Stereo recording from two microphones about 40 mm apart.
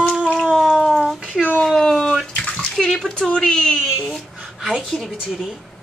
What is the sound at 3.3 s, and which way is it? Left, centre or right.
Speech, left.